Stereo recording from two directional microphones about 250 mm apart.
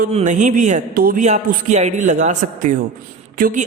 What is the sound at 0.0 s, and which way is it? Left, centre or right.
A woman's voice, right.